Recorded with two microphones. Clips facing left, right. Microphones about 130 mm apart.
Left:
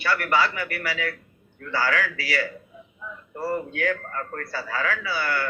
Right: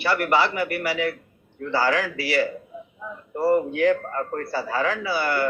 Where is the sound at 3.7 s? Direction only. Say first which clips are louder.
Right 6 dB; 25° right (ahead or behind).